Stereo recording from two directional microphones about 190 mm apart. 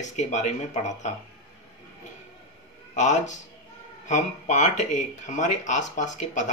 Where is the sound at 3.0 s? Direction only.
40° left (ahead or behind).